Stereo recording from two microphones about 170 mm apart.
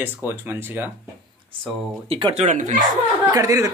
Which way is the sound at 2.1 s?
35° right (ahead or behind).